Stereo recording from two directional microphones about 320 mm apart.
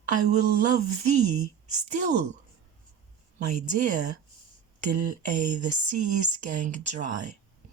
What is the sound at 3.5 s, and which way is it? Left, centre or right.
Speech, right.